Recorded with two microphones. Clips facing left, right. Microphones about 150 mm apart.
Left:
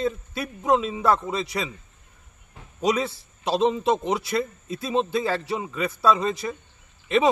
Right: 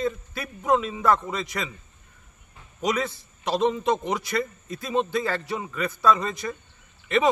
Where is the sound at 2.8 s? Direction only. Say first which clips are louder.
Left 2 dB; 30° left (ahead or behind).